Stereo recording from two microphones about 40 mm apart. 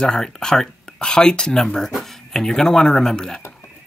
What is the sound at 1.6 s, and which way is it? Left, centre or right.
Speech, centre.